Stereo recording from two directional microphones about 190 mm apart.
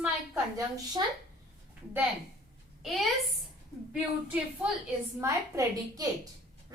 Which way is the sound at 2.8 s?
Centre (ahead or behind).